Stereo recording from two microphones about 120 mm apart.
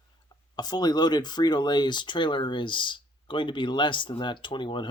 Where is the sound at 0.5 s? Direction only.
35° left (ahead or behind).